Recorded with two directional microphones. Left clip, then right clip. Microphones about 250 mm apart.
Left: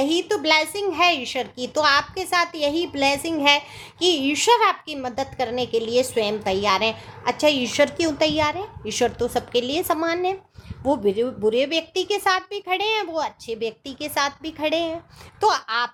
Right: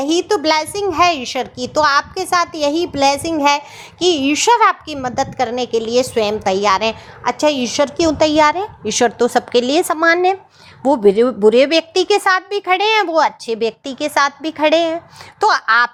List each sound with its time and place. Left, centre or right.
0.0 s a child's voice: centre